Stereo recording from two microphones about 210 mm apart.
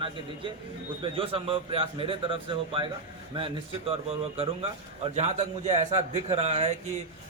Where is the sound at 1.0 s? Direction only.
25° right (ahead or behind).